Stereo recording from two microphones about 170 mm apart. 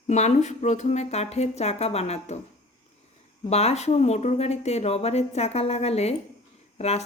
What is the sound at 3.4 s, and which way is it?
Speech, 40° left (ahead or behind).